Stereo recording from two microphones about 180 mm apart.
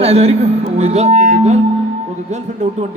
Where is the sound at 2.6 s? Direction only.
40° right (ahead or behind).